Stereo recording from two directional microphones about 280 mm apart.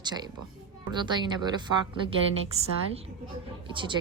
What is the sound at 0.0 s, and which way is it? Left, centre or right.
A woman's voice, centre.